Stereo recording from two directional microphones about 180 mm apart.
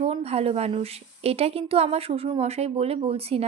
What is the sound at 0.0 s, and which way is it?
A woman's voice, 35° right (ahead or behind).